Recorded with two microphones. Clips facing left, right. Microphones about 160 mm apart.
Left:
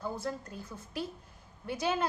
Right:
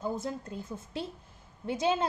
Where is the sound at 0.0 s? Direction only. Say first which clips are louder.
Right 2 dB; 20° right (ahead or behind).